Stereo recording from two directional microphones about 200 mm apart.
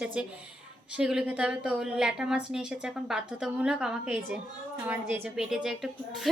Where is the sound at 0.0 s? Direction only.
5° right (ahead or behind).